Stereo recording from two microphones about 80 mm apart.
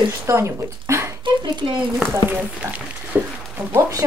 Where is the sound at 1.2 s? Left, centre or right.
Right.